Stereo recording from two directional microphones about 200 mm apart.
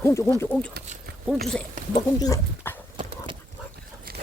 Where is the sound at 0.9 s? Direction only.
35° right (ahead or behind).